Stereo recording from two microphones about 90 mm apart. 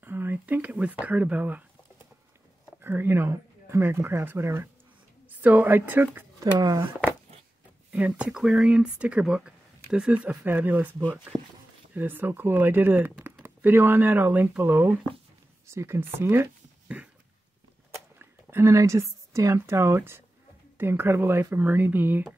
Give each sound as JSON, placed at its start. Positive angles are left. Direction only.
{"t": 0.0, "sound": "speech", "side_deg": -20}
{"t": 2.8, "sound": "speech", "side_deg": -25}
{"t": 6.4, "sound": "speech", "side_deg": -40}
{"t": 8.1, "sound": "speech", "side_deg": -5}
{"t": 11.9, "sound": "speech", "side_deg": -20}
{"t": 17.9, "sound": "speech", "side_deg": -30}